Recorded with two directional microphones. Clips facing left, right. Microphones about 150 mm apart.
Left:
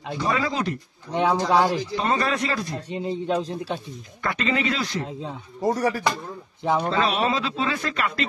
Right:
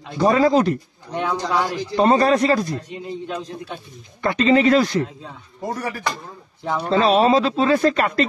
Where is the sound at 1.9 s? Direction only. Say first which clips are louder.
Right 8 dB; 40° right (ahead or behind).